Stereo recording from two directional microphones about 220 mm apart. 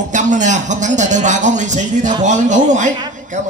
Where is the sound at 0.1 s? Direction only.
35° right (ahead or behind).